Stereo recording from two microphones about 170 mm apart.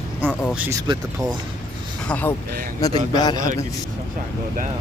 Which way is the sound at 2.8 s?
20° left (ahead or behind).